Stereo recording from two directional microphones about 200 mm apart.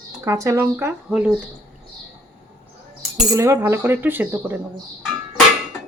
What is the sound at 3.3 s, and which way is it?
Speech, 15° right (ahead or behind).